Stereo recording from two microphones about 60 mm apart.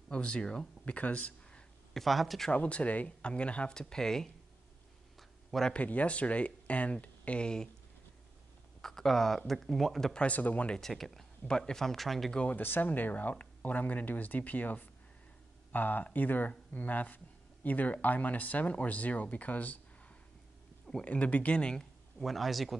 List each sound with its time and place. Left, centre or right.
0.1 s speech: centre
0.9 s speech: left
2.0 s speech: centre
2.5 s speech: left
5.7 s speech: left
8.8 s speech: centre
10.2 s speech: left
10.8 s speech: centre
12.4 s speech: left
21.0 s speech: left
22.2 s speech: centre